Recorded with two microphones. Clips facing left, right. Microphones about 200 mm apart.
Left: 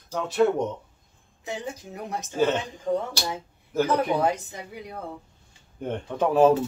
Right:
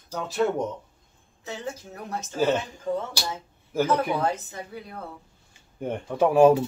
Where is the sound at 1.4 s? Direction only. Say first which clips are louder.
Left 1 dB; 15° left (ahead or behind).